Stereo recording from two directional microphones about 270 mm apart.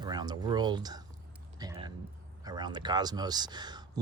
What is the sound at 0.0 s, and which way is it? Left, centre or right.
Speech, centre.